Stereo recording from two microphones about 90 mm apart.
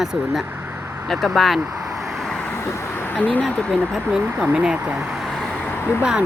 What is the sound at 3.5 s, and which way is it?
Speech, 10° left (ahead or behind).